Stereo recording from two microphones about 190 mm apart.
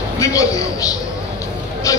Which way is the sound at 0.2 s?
15° left (ahead or behind).